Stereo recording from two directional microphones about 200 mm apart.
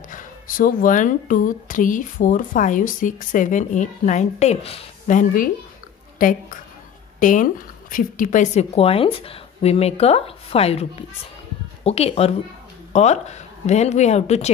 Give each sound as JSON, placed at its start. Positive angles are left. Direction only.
{"t": 0.1, "sound": "a woman's voice", "side_deg": 40}